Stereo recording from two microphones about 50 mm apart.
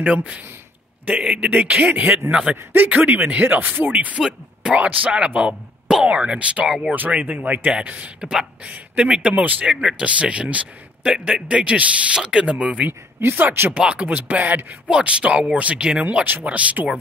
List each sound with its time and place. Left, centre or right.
0.0 s speech: right
2.5 s speech: right
3.1 s speech: right
8.2 s speech: centre
9.3 s speech: right
9.7 s speech: centre
13.2 s speech: right
13.7 s speech: right
14.9 s speech: centre